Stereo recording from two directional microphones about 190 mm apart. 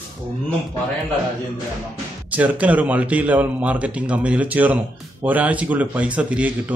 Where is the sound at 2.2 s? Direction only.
10° right (ahead or behind).